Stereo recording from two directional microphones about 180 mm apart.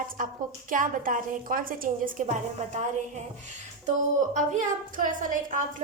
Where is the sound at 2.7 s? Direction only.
40° right (ahead or behind).